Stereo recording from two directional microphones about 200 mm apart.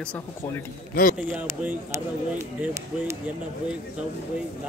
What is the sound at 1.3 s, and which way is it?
Speech, 10° right (ahead or behind).